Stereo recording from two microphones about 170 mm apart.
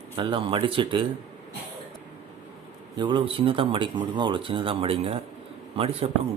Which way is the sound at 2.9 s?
30° right (ahead or behind).